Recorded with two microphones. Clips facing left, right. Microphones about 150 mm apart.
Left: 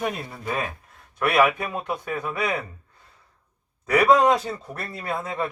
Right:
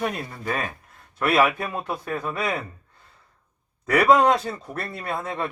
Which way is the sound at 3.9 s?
Centre (ahead or behind).